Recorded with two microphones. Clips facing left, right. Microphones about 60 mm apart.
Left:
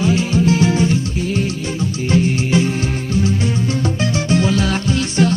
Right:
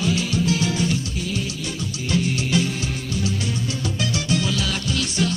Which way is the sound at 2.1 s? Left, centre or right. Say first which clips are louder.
Left 6 dB; left.